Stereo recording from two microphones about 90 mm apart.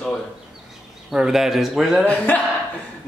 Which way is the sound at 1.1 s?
5° right (ahead or behind).